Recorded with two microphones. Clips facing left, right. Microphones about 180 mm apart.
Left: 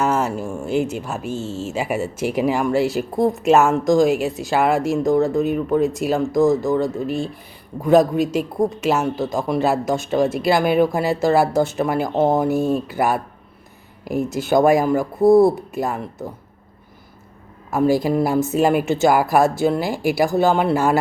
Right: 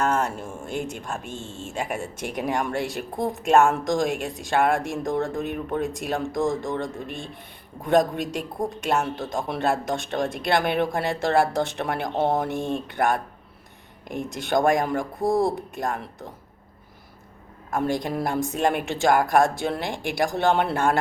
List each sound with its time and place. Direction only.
0.0 s speech: 5° left (ahead or behind)
15.2 s speech: 60° left (ahead or behind)
15.4 s speech: 5° left (ahead or behind)
17.7 s speech: 5° left (ahead or behind)